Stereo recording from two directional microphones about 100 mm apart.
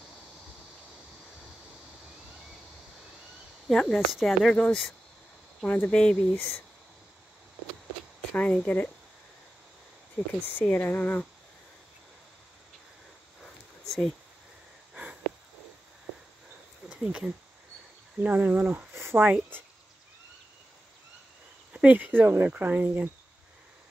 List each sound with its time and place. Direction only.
3.6 s speech: 5° left (ahead or behind)
8.3 s speech: 15° left (ahead or behind)
10.2 s speech: centre (ahead or behind)
10.6 s speech: 15° left (ahead or behind)
13.4 s a sound: centre (ahead or behind)
16.9 s speech: 10° right (ahead or behind)
21.7 s speech: 15° right (ahead or behind)